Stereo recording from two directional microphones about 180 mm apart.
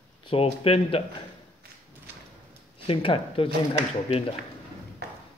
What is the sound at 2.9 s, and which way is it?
Speech, 30° left (ahead or behind).